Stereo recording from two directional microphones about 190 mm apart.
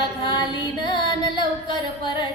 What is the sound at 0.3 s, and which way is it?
Singing, 25° left (ahead or behind).